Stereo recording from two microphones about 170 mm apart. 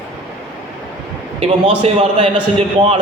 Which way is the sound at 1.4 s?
35° right (ahead or behind).